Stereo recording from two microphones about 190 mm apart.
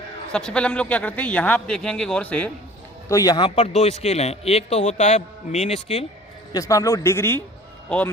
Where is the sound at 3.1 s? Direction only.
20° left (ahead or behind); by 6.0 s 35° left (ahead or behind).